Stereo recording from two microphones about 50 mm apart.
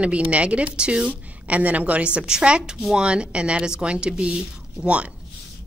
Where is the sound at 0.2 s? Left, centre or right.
Right.